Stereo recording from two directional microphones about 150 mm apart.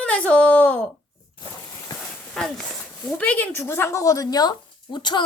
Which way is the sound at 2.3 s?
5° left (ahead or behind).